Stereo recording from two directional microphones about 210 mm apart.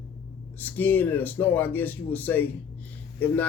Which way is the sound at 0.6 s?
10° left (ahead or behind).